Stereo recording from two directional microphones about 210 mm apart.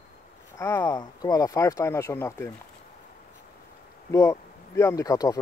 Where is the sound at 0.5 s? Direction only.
15° left (ahead or behind).